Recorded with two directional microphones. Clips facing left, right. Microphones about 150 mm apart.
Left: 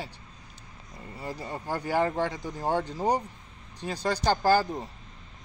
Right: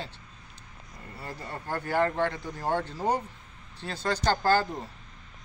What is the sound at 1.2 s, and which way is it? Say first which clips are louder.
Speech: left 3 dB; 15° left (ahead or behind).